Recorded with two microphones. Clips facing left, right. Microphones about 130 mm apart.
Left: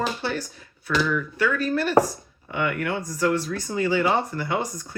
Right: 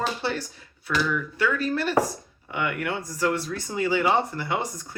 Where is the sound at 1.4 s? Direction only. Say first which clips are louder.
Left 1 dB; 25° right (ahead or behind).